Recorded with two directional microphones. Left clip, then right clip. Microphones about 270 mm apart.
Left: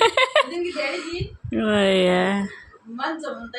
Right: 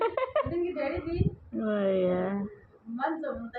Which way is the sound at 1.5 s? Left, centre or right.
Left.